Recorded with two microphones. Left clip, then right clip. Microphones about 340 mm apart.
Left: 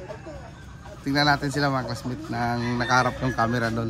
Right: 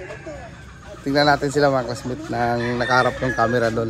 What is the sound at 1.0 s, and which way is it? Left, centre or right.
Speech, centre.